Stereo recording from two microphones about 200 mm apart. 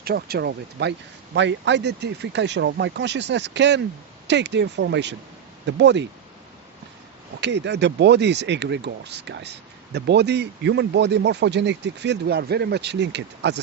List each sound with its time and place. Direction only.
0.0 s speech: 50° right (ahead or behind)
7.4 s speech: 60° right (ahead or behind)